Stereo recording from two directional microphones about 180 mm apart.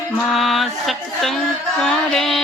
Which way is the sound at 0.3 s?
Centre (ahead or behind).